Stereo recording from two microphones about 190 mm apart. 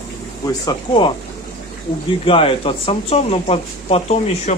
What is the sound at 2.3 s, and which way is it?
Speech, 30° left (ahead or behind).